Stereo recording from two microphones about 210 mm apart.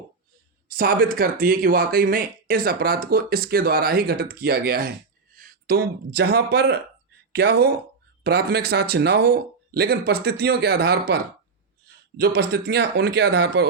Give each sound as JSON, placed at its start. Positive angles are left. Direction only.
{"t": 0.7, "sound": "speech", "side_deg": -45}